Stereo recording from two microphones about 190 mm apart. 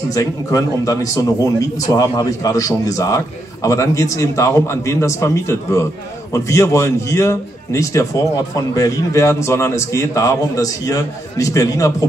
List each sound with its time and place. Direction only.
0.1 s a man's voice: 15° left (ahead or behind)